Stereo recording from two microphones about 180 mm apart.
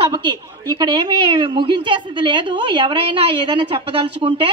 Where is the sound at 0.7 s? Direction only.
25° right (ahead or behind).